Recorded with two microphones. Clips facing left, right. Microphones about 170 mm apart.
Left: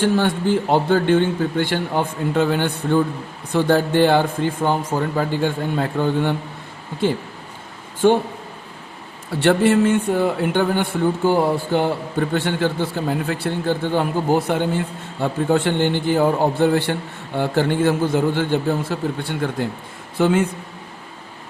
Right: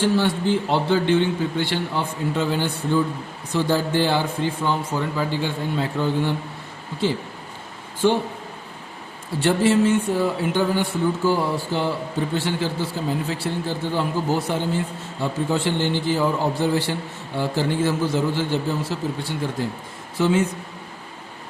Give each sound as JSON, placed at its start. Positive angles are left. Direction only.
{"t": 0.0, "sound": "a man's voice", "side_deg": 55}
{"t": 9.4, "sound": "a man's voice", "side_deg": 60}